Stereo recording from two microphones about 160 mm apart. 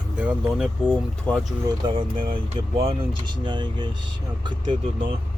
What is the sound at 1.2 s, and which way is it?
Speech, 5° left (ahead or behind).